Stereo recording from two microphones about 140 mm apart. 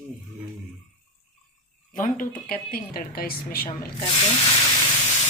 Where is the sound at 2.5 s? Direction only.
90° left.